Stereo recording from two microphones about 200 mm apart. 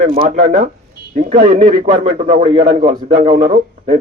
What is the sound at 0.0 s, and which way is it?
A man's voice, 40° right (ahead or behind).